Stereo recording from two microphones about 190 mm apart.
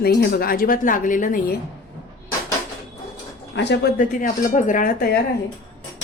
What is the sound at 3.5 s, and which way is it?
A woman's voice, 65° left (ahead or behind).